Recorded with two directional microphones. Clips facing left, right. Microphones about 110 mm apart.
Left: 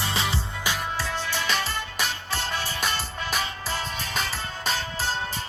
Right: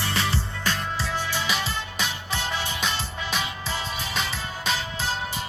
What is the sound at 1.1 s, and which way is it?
Music, 15° right (ahead or behind).